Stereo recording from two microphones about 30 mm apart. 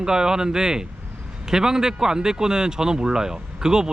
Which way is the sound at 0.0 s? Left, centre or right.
Right.